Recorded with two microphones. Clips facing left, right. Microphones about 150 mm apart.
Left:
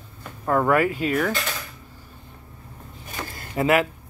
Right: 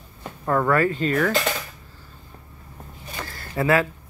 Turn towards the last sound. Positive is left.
turn(degrees=20)  # may be behind; listen again after turning